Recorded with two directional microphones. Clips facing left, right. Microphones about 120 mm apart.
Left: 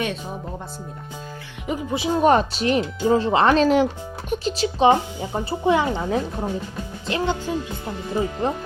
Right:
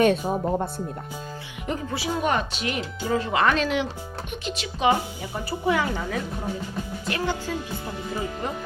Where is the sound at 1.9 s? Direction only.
20° left (ahead or behind).